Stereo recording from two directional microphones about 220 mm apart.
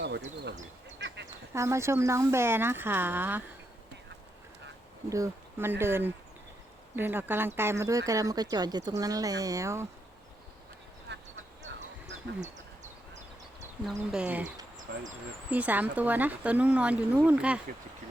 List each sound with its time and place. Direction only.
0.9 s duck: 50° right (ahead or behind)
1.5 s speech: 15° right (ahead or behind)
5.0 s speech: 15° right (ahead or behind)
11.1 s quack: 50° right (ahead or behind)
13.8 s speech: 5° right (ahead or behind)
15.4 s speech: 5° right (ahead or behind)